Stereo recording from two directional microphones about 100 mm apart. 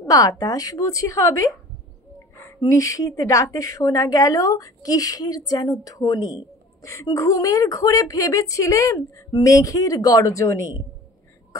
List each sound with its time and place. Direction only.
0.0 s a woman's voice: 35° left (ahead or behind)
2.6 s a woman's voice: 35° left (ahead or behind)